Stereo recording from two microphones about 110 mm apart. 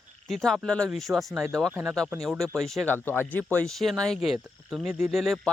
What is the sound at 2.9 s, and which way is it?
Speech, 20° left (ahead or behind).